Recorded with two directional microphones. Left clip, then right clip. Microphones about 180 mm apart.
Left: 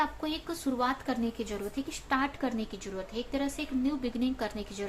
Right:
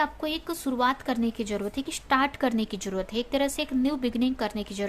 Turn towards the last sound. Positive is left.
turn(degrees=-35)  # may be behind; listen again after turning